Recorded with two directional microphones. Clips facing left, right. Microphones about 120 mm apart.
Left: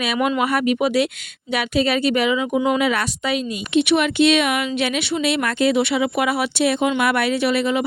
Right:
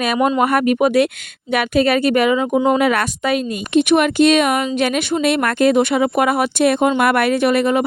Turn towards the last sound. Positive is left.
turn(degrees=-50)  # may be behind; listen again after turning